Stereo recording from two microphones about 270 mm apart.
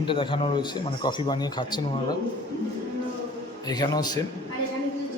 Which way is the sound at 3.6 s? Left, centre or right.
Centre.